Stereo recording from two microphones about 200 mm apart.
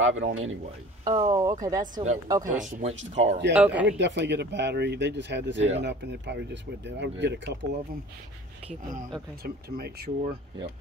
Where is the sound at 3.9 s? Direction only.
60° right (ahead or behind).